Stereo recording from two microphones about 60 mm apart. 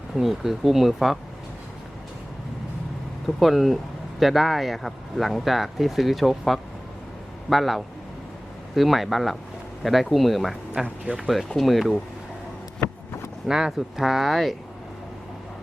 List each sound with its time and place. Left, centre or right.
0.2 s speech: centre
3.2 s speech: centre
11.0 s speech: centre
11.3 s speech: centre
13.5 s speech: centre